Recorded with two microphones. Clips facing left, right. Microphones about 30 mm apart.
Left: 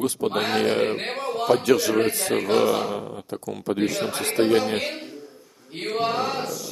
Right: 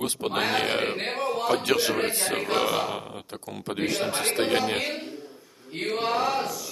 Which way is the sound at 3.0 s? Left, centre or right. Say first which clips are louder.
Left 4 dB; right.